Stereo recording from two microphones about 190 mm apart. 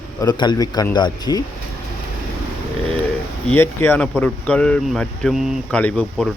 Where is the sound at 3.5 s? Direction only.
10° left (ahead or behind).